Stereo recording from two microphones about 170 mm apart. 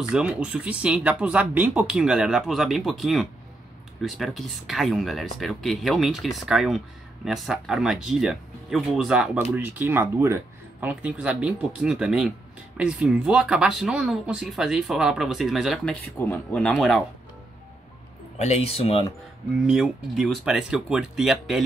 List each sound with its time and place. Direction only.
0.1 s speech: 5° right (ahead or behind)
18.4 s speech: 40° left (ahead or behind)
19.6 s speech: 5° right (ahead or behind)